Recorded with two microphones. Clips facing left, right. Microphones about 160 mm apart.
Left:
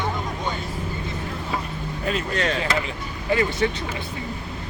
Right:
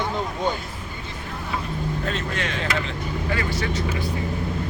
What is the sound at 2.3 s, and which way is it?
Speech, 40° left (ahead or behind).